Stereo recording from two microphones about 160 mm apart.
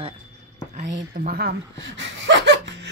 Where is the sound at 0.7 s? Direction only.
65° right (ahead or behind).